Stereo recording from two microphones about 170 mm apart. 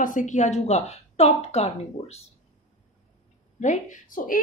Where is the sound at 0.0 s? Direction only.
50° left (ahead or behind).